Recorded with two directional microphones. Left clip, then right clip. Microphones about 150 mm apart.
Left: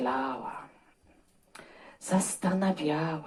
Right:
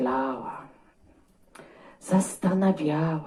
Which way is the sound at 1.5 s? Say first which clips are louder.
Right 1 dB; 20° left (ahead or behind).